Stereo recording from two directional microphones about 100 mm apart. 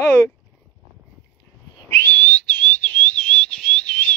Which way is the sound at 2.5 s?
15° left (ahead or behind).